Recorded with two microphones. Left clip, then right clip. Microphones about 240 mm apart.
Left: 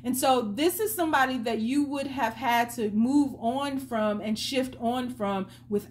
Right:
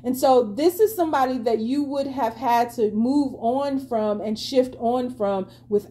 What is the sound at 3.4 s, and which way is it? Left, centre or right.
Speech, left.